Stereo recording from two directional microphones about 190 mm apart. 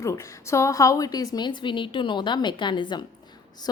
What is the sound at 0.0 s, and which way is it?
A woman's voice, 15° left (ahead or behind).